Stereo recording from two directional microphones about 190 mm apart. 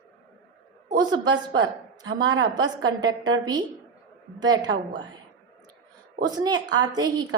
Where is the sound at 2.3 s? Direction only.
20° right (ahead or behind).